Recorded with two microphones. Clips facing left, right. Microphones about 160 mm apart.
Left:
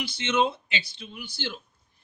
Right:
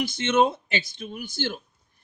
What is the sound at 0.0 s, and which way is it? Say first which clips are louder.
Speech: right 4 dB; 50° right (ahead or behind).